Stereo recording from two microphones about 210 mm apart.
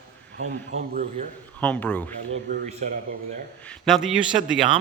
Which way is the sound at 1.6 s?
5° left (ahead or behind).